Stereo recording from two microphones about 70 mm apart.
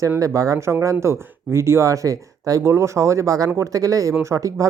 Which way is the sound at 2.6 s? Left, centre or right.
Right.